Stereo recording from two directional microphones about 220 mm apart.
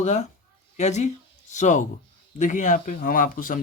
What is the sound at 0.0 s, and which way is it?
Speech, 30° left (ahead or behind).